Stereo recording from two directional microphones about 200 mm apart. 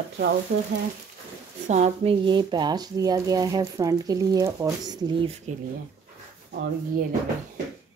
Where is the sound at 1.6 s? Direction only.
35° right (ahead or behind).